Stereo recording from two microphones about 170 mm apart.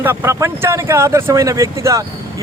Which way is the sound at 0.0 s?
15° right (ahead or behind).